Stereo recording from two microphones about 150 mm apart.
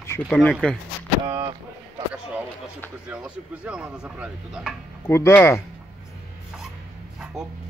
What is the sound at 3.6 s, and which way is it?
Speech, 5° right (ahead or behind).